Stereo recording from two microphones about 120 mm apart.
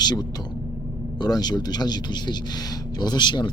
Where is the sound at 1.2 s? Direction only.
35° left (ahead or behind).